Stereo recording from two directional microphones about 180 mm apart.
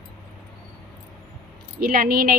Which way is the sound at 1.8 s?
55° right (ahead or behind).